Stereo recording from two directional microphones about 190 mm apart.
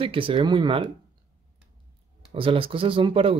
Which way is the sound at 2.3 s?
30° right (ahead or behind).